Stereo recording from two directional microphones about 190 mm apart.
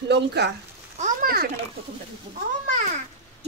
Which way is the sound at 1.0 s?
50° right (ahead or behind).